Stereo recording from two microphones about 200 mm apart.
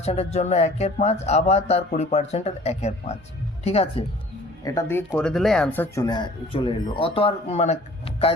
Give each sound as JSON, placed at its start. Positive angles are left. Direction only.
{"t": 0.0, "sound": "speech", "side_deg": 30}
{"t": 4.6, "sound": "speech", "side_deg": 15}